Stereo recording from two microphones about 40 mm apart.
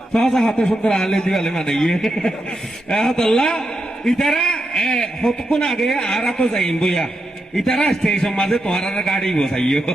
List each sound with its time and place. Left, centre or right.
0.1 s speech: centre
4.4 s a man's voice: left
5.8 s speech: centre